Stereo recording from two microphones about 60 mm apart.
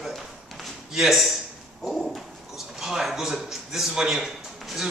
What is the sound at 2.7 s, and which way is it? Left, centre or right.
A man's voice, centre.